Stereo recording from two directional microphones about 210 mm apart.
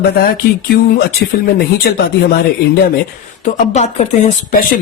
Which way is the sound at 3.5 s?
35° left (ahead or behind).